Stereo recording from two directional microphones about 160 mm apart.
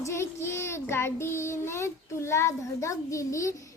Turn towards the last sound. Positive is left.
turn(degrees=20)  # may be behind; listen again after turning